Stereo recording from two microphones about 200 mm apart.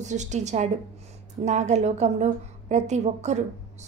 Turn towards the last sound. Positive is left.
turn(degrees=-35)  # may be behind; listen again after turning